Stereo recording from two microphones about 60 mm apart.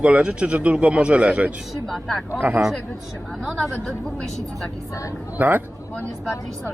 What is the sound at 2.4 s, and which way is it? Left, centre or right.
Speech, right.